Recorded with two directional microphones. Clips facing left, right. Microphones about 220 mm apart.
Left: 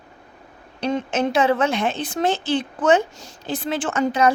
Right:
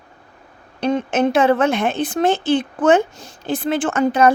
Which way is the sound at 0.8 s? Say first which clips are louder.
Right 4 dB; 55° right (ahead or behind).